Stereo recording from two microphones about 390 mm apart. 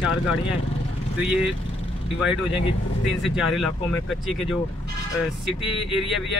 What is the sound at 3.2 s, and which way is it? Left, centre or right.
Speech, centre.